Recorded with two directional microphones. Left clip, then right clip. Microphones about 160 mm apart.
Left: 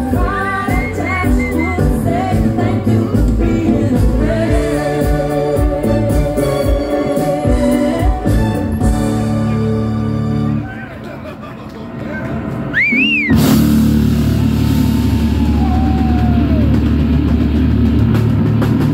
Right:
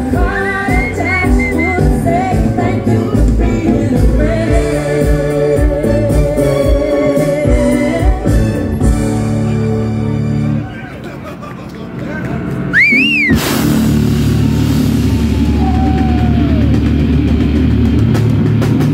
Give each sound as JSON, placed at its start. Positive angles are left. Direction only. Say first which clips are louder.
{"t": 12.7, "sound": "music", "louder": "right 4 dB", "side_deg": -35}